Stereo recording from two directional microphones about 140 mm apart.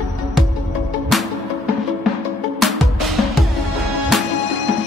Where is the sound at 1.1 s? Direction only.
Centre (ahead or behind).